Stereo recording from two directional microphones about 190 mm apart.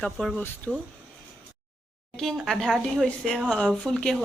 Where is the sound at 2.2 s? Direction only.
Centre (ahead or behind).